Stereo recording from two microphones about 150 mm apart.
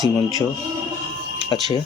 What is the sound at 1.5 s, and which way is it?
Speech, 30° left (ahead or behind).